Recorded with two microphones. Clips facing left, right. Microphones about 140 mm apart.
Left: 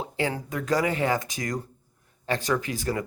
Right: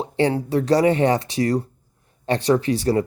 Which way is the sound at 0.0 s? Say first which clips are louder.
Right 8 dB; 35° right (ahead or behind).